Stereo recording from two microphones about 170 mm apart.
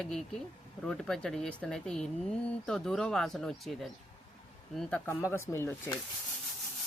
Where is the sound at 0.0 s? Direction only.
5° left (ahead or behind).